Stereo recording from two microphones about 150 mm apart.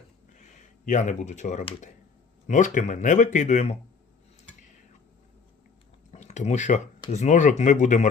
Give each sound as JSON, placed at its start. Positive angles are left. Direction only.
{"t": 0.3, "sound": "a sound", "side_deg": 55}
{"t": 2.5, "sound": "speech", "side_deg": 55}
{"t": 6.1, "sound": "speech", "side_deg": 50}